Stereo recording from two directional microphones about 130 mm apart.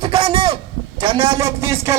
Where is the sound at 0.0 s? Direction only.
45° right (ahead or behind).